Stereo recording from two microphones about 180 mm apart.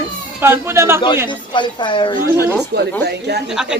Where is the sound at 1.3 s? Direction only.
25° left (ahead or behind).